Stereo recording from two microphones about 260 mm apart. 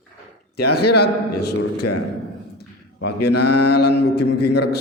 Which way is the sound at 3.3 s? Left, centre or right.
Left.